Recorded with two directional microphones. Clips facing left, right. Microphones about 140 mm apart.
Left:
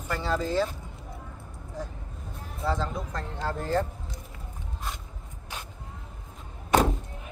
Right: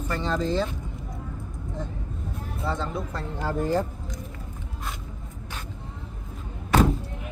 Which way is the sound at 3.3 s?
15° right (ahead or behind).